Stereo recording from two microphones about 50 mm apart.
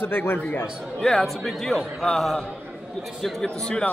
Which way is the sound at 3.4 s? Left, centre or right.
Centre.